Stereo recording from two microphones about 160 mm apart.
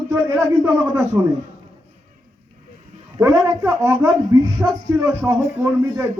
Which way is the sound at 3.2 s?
15° right (ahead or behind).